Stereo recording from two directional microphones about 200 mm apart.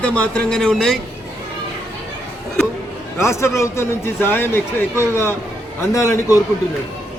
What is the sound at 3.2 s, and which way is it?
A man's voice, 15° left (ahead or behind).